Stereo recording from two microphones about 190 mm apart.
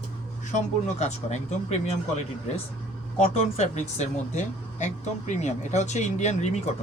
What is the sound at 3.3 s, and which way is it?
Speech, 35° left (ahead or behind).